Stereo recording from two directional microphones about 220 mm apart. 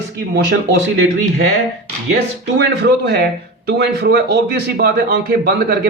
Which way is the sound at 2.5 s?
50° right (ahead or behind).